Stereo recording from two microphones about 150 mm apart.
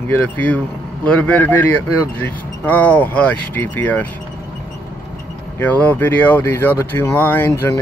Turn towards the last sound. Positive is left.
turn(degrees=15)  # may be behind; listen again after turning